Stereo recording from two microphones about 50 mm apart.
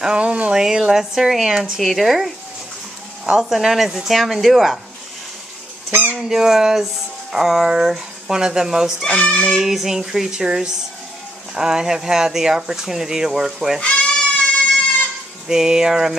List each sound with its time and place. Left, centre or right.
0.0 s speech: centre
5.9 s goose: right
6.1 s fowl: centre
7.3 s speech: centre
9.0 s speech: left
9.5 s speech: centre
13.7 s speech: left
15.4 s speech: centre